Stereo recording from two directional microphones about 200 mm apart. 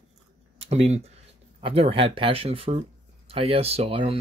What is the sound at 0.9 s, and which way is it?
Speech, 30° right (ahead or behind).